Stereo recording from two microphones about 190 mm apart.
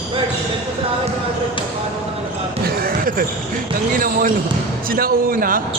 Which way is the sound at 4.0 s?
50° right (ahead or behind).